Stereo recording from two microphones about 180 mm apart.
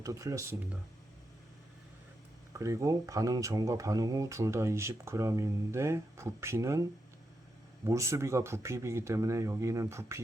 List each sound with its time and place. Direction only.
0.0 s speech: 20° right (ahead or behind)
2.5 s speech: 15° right (ahead or behind)
7.9 s speech: 15° right (ahead or behind)